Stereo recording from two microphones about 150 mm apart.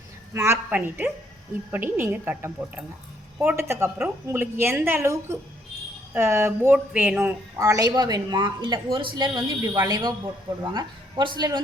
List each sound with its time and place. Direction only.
0.3 s a woman's voice: 15° right (ahead or behind)